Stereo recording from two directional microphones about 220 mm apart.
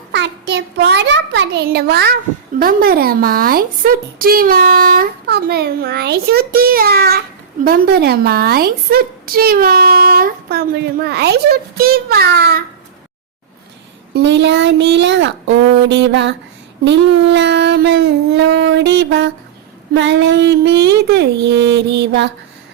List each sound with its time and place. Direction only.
0.1 s a child's voice: 50° right (ahead or behind)
14.1 s speech: 50° right (ahead or behind)